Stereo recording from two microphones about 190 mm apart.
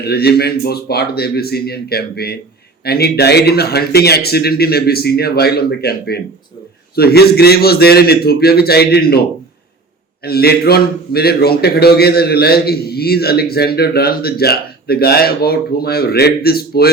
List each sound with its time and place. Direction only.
0.0 s a man's voice: 55° left (ahead or behind)
10.2 s a man's voice: 55° left (ahead or behind)